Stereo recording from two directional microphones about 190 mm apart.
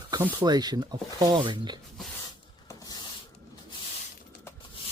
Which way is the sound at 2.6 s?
20° left (ahead or behind).